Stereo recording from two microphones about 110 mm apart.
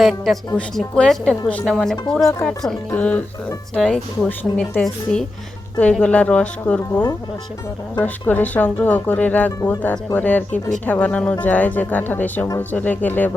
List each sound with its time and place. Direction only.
0.0 s a woman's voice: centre (ahead or behind)
4.3 s speech: 15° left (ahead or behind)